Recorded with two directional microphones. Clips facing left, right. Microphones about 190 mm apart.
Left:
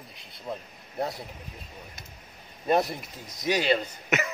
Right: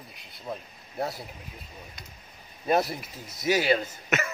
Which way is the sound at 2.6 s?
5° right (ahead or behind).